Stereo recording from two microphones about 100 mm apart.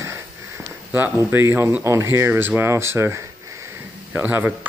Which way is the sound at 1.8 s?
30° right (ahead or behind).